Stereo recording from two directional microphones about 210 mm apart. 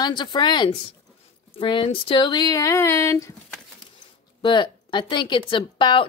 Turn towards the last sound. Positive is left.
turn(degrees=25)  # may be behind; listen again after turning